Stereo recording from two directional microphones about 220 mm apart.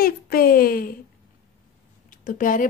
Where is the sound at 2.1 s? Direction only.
35° left (ahead or behind).